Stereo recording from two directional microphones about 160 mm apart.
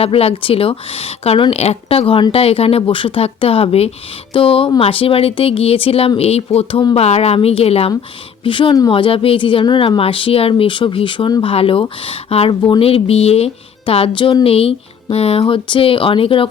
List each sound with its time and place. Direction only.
0.0 s speech: 40° left (ahead or behind)